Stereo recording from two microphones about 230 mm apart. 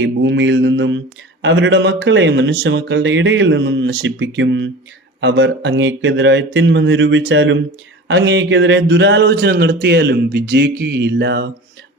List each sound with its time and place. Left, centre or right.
0.0 s speech: right